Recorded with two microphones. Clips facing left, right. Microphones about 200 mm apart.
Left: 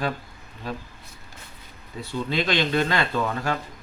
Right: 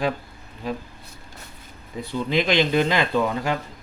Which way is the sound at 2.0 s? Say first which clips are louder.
Right 3 dB; 15° right (ahead or behind).